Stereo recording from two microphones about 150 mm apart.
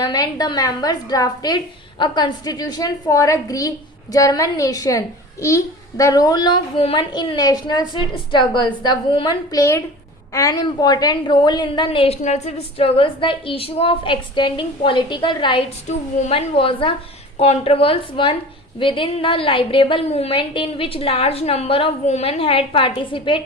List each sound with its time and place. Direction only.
0.0 s a child's voice: 25° left (ahead or behind)
15.9 s a woman's voice: 50° left (ahead or behind)
16.6 s a woman's voice: 35° left (ahead or behind)